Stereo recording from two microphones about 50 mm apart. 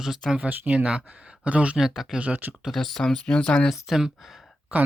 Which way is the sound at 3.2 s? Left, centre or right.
Centre.